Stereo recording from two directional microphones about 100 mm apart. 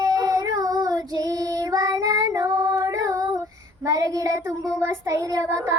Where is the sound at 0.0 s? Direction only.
40° right (ahead or behind).